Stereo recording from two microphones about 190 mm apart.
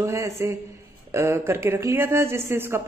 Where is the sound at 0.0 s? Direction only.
15° right (ahead or behind).